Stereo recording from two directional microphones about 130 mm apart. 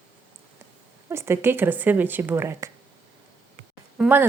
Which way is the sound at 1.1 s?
20° right (ahead or behind).